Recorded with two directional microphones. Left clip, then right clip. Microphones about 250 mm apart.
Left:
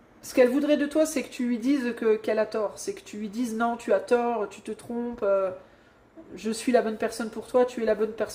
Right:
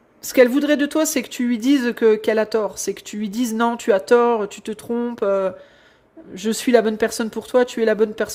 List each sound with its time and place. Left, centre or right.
0.3 s speech: right